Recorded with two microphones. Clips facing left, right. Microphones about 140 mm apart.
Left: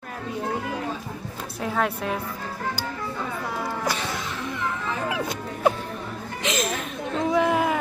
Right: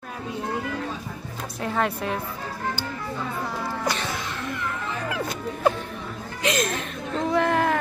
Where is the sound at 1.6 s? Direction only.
Centre (ahead or behind).